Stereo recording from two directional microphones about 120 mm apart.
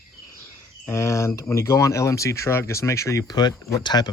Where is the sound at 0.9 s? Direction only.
25° left (ahead or behind).